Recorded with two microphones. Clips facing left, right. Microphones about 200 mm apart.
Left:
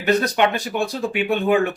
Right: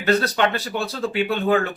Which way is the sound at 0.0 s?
15° left (ahead or behind).